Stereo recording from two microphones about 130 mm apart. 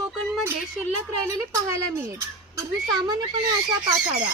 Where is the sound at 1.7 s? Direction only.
25° right (ahead or behind).